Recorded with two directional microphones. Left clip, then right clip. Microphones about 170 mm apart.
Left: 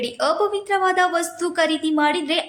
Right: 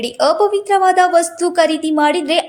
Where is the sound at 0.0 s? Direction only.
25° right (ahead or behind).